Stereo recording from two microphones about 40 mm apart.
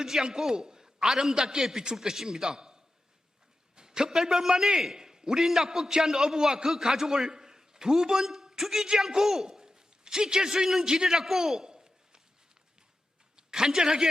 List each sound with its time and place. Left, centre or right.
0.0 s a man's voice: centre
13.3 s a man's voice: centre